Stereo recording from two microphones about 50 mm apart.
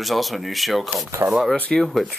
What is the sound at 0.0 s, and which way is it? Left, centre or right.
Speech, centre.